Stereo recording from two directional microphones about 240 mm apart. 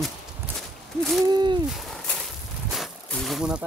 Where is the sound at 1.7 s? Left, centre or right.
Centre.